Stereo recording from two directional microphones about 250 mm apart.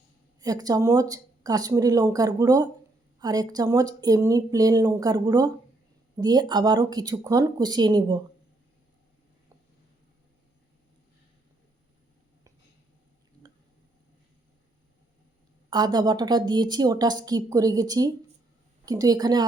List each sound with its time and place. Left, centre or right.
0.3 s a woman's voice: centre
15.7 s a woman's voice: centre